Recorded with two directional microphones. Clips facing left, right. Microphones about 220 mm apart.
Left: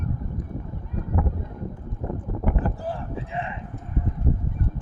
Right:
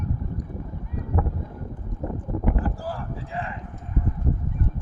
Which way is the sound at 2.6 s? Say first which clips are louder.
Left 1 dB; 20° left (ahead or behind).